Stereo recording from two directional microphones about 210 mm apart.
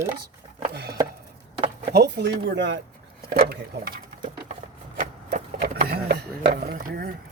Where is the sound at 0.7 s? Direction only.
50° right (ahead or behind).